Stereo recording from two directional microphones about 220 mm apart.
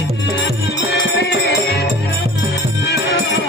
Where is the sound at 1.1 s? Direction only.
50° left (ahead or behind).